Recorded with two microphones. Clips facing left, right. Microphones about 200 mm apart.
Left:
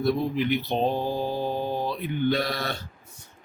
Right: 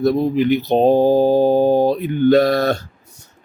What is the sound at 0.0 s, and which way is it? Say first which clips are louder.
Speech: right 8 dB; 40° right (ahead or behind).